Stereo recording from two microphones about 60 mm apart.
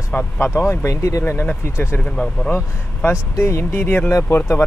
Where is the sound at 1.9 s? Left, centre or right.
Centre.